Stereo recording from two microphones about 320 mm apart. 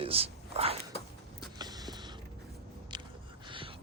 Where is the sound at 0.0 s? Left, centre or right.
Centre.